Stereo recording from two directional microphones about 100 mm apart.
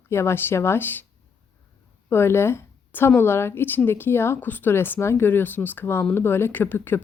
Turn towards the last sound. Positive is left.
turn(degrees=20)  # may be behind; listen again after turning